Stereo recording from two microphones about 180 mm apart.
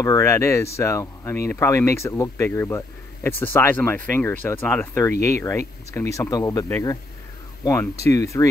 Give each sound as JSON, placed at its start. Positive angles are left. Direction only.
{"t": 0.0, "sound": "speech", "side_deg": 15}